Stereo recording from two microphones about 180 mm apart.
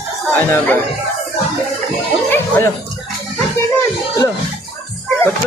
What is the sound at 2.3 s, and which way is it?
Speech, 10° left (ahead or behind).